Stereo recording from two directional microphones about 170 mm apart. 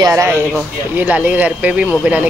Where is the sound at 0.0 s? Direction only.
15° right (ahead or behind).